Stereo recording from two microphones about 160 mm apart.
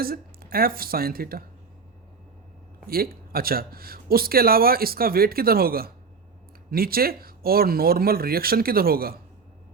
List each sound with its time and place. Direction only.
0.0 s speech: 70° right (ahead or behind)
2.8 s speech: 70° right (ahead or behind)